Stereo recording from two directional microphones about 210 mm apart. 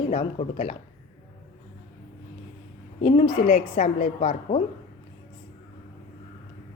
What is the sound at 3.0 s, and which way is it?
A woman's voice, 30° left (ahead or behind).